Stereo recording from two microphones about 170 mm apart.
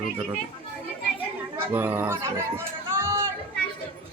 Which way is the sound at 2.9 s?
15° right (ahead or behind).